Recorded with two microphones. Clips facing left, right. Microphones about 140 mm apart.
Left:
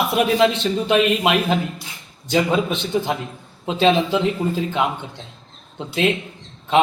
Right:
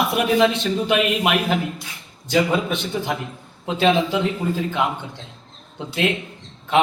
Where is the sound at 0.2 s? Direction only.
20° left (ahead or behind).